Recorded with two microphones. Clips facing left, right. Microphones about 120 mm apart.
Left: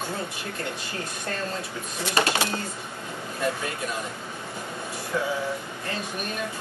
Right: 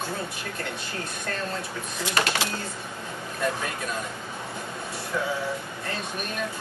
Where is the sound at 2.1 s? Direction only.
25° left (ahead or behind).